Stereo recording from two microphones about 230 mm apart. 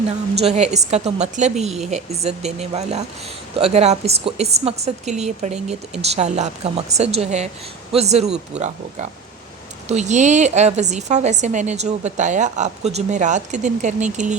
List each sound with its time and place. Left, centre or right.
0.5 s a woman's voice: right